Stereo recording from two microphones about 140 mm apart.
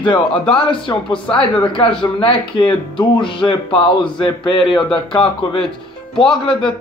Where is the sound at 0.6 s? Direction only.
35° left (ahead or behind).